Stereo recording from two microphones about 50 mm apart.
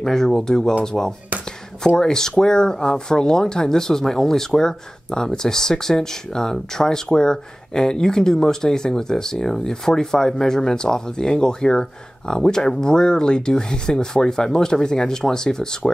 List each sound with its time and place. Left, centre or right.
0.0 s speech: centre